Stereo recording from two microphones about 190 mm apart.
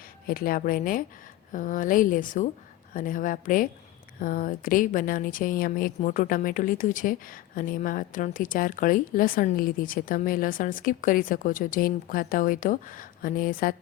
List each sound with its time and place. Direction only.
0.3 s a woman's voice: 50° left (ahead or behind)